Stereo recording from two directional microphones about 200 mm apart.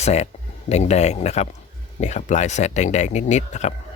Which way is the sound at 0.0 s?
35° left (ahead or behind).